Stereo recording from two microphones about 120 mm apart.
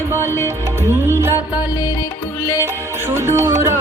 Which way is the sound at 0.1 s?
20° right (ahead or behind).